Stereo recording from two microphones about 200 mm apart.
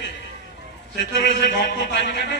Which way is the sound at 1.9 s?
55° left (ahead or behind).